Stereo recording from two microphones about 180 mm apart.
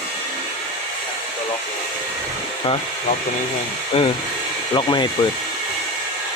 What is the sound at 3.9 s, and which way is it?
Speech, 35° left (ahead or behind).